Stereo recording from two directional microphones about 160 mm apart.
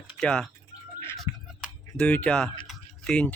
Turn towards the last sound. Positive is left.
turn(degrees=5)  # may be behind; listen again after turning